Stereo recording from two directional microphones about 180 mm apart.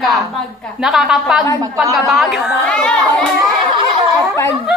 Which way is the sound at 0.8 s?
Centre (ahead or behind).